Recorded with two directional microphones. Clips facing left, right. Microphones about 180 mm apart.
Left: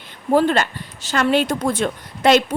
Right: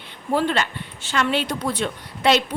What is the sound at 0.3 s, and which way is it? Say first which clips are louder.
A woman's voice: left 5 dB; 45° left (ahead or behind).